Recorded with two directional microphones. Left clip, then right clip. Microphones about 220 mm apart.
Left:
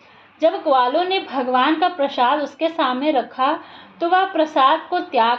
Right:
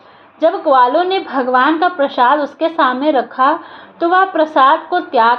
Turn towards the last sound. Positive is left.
turn(degrees=-25)  # may be behind; listen again after turning